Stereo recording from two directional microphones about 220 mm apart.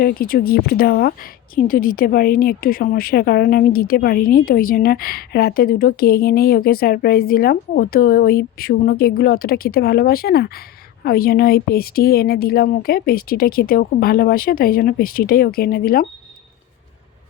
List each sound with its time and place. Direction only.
0.0 s a woman's voice: 40° left (ahead or behind)